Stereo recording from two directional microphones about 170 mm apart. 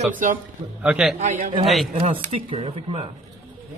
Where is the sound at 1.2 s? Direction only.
45° right (ahead or behind).